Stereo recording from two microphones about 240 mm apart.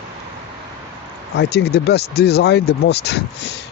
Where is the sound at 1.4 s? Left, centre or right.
Left.